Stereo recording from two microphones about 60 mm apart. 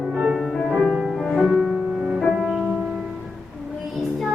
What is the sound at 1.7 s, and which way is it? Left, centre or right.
Music, centre.